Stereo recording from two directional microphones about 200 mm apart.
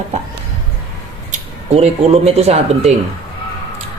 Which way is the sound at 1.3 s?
30° right (ahead or behind).